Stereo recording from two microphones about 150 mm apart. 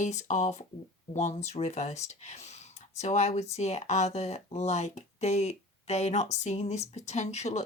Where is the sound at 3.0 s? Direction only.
50° left (ahead or behind).